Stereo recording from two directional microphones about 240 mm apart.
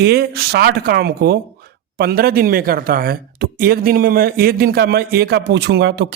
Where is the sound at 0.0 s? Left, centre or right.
Right.